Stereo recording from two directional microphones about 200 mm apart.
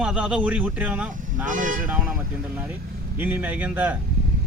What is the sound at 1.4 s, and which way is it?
Speech, 40° right (ahead or behind).